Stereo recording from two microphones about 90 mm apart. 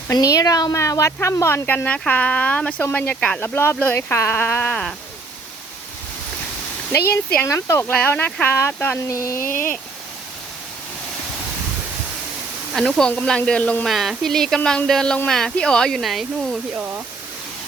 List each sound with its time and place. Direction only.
0.1 s speech: 40° left (ahead or behind)
1.7 s speech: 15° left (ahead or behind)
3.4 s speech: 25° left (ahead or behind)
4.7 s speech: 10° left (ahead or behind)
7.4 s speech: 35° left (ahead or behind)
7.9 s speech: 20° left (ahead or behind); by 9.4 s 35° left (ahead or behind)
12.7 s speech: centre (ahead or behind)
13.8 s speech: centre (ahead or behind)